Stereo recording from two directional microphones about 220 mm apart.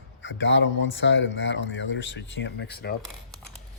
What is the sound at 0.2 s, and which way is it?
Speech, 55° left (ahead or behind).